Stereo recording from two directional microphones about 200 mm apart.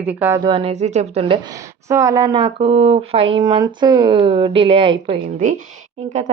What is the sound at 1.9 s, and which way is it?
Speech, 15° right (ahead or behind).